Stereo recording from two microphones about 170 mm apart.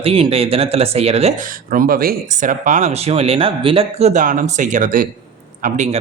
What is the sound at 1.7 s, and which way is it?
Speech, 55° right (ahead or behind).